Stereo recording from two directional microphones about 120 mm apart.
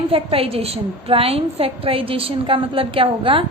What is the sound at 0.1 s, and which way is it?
A woman's voice, 50° right (ahead or behind).